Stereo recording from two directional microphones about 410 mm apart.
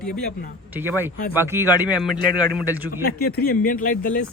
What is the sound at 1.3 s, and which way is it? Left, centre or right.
Speech, centre.